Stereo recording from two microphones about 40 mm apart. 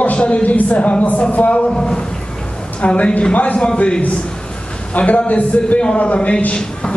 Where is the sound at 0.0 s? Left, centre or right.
Left.